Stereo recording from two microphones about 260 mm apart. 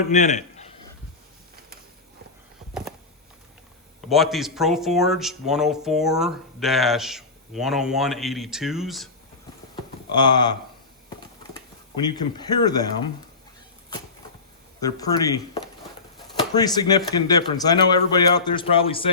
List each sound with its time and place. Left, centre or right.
0.1 s a sound: left
4.1 s speech: centre
10.1 s a man's voice: centre
12.0 s a man's voice: centre
14.8 s a man's voice: centre